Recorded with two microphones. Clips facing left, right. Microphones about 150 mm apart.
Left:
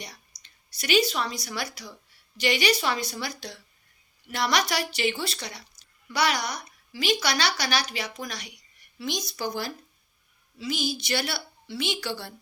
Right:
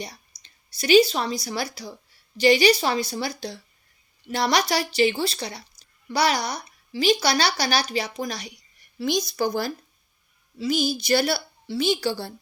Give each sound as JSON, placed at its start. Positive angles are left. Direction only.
{"t": 0.0, "sound": "a woman's voice", "side_deg": -30}
{"t": 9.0, "sound": "a woman's voice", "side_deg": -45}